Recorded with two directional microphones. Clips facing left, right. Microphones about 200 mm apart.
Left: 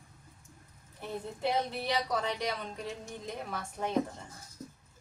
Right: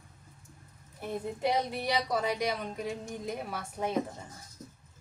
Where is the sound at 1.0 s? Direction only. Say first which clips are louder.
Right 3 dB; 10° right (ahead or behind).